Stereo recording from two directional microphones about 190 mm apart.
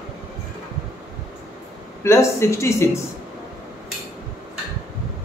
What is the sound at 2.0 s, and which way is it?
Speech, 15° left (ahead or behind).